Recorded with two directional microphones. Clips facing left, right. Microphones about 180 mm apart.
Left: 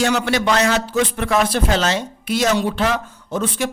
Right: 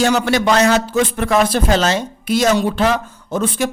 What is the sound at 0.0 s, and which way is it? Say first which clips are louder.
A man's voice: right 3 dB; 40° right (ahead or behind).